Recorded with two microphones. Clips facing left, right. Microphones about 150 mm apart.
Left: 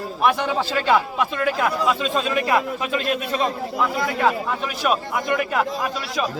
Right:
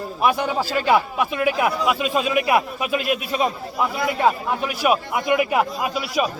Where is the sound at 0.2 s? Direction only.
5° right (ahead or behind).